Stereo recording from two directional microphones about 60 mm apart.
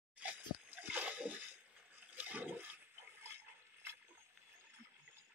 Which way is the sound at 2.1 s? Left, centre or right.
Right.